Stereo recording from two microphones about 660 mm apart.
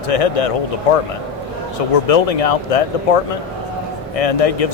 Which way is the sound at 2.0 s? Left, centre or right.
Left.